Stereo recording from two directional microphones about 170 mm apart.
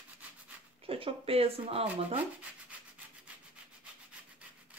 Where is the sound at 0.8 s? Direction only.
35° right (ahead or behind).